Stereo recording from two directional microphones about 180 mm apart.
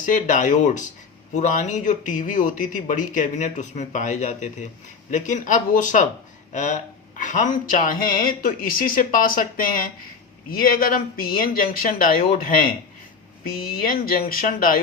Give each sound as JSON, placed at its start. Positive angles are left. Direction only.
{"t": 0.0, "sound": "speech", "side_deg": 45}